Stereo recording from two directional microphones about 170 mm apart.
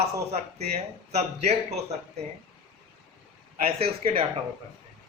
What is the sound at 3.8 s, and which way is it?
Speech, 35° right (ahead or behind).